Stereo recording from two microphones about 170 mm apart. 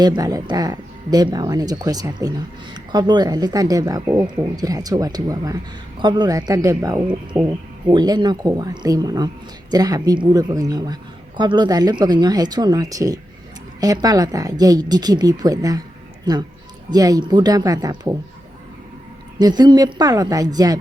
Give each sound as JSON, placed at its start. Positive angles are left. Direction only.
{"t": 0.0, "sound": "speech", "side_deg": -20}
{"t": 16.9, "sound": "speech", "side_deg": -20}
{"t": 19.4, "sound": "speech", "side_deg": -25}